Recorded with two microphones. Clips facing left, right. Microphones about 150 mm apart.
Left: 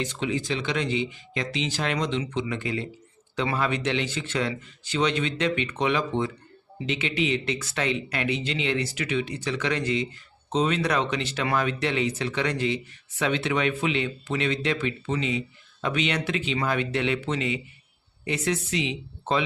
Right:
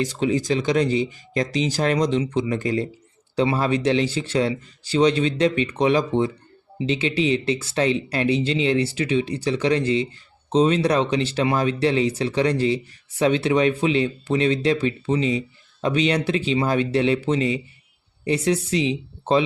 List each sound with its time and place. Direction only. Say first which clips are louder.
0.0 s speech: right 6 dB; 40° right (ahead or behind)